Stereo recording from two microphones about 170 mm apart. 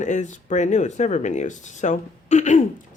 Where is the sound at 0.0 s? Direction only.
45° left (ahead or behind).